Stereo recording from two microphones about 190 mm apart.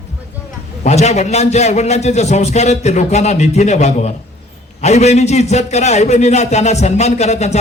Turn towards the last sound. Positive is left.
turn(degrees=35)  # may be behind; listen again after turning